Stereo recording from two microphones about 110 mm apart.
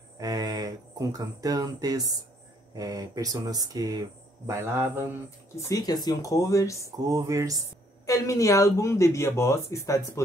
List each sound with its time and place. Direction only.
0.2 s speech: 35° right (ahead or behind); by 5.0 s 20° right (ahead or behind)
5.7 s speech: 35° left (ahead or behind)
7.1 s speech: 30° right (ahead or behind)
8.1 s speech: 30° left (ahead or behind)